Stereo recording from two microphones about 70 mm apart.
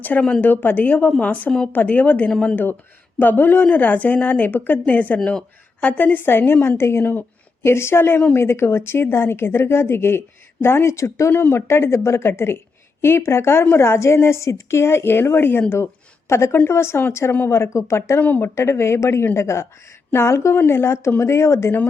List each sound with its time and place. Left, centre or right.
0.0 s a woman's voice: centre; by 18.2 s left
18.2 s speech: left
18.4 s a woman's voice: left